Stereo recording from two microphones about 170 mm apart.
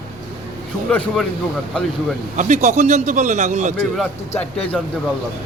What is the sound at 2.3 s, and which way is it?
A man's voice, 45° right (ahead or behind).